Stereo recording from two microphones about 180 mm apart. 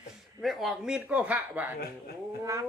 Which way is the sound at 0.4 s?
Centre (ahead or behind).